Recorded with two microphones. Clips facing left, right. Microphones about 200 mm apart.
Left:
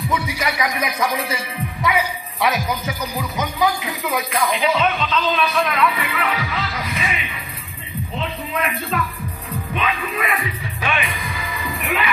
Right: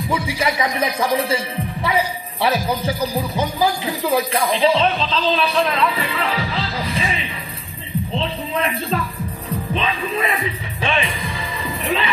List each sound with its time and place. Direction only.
0.1 s speech: 30° right (ahead or behind)
8.1 s music: 30° right (ahead or behind)